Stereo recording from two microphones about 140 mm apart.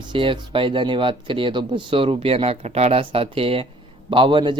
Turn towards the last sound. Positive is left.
turn(degrees=-35)  # may be behind; listen again after turning